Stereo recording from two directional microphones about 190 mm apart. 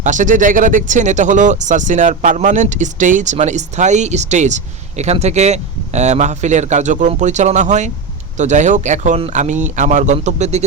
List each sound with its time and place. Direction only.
0.0 s speech: 40° right (ahead or behind)